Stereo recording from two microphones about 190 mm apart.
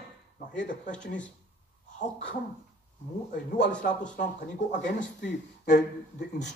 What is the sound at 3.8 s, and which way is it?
Speech, 40° left (ahead or behind).